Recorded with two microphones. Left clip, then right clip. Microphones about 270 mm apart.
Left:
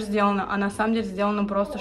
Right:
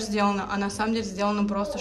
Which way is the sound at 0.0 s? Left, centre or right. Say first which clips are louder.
Left 2 dB; centre.